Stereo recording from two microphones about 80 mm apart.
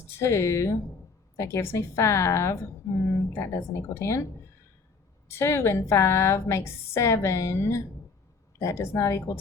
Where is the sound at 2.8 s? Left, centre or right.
Left.